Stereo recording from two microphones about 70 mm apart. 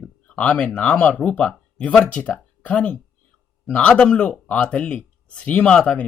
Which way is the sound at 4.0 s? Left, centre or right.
Centre.